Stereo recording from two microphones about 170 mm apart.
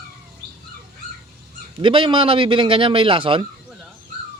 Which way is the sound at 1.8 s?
30° right (ahead or behind).